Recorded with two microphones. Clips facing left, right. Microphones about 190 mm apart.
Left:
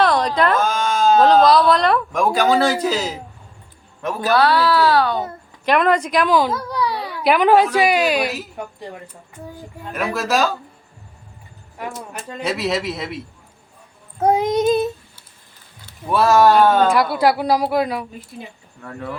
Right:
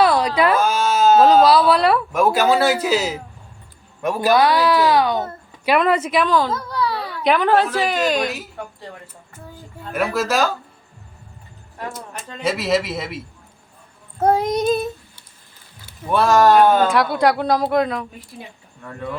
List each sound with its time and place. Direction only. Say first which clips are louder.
0.0 s a woman's voice: right 1 dB; 10° right (ahead or behind)
6.2 s a child's voice: left 2 dB; 10° left (ahead or behind)
9.9 s a woman's voice: right 1 dB; centre (ahead or behind)
12.4 s a woman's voice: right 2 dB; centre (ahead or behind)
14.2 s child singing: left 1 dB; 15° left (ahead or behind)
16.1 s a woman's voice: even; 5° left (ahead or behind)